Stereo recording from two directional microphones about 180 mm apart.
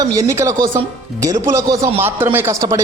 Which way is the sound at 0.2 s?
15° right (ahead or behind).